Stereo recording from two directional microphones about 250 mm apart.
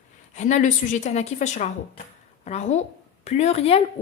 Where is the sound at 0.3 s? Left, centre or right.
Left.